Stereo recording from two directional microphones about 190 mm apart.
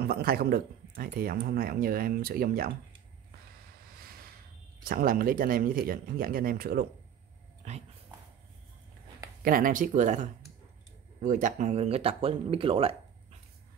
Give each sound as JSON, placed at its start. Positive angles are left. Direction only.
{"t": 0.0, "sound": "speech", "side_deg": -55}
{"t": 4.8, "sound": "speech", "side_deg": -50}
{"t": 7.6, "sound": "speech", "side_deg": -40}
{"t": 9.4, "sound": "speech", "side_deg": -45}